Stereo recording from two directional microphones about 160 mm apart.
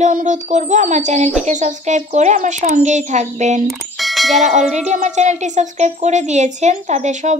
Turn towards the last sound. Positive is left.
turn(degrees=-45)  # may be behind; listen again after turning